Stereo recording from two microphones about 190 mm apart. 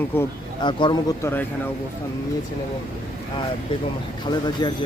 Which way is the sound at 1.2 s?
10° left (ahead or behind).